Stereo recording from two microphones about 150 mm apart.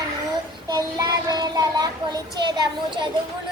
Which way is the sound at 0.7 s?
25° right (ahead or behind).